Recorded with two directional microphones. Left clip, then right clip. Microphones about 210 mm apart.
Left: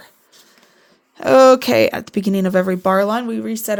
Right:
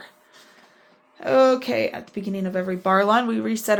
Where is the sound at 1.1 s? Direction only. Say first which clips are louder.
Left 8 dB; 55° left (ahead or behind).